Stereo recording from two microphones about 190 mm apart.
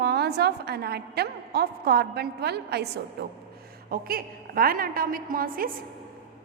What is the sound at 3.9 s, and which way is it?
A woman's voice, 50° right (ahead or behind).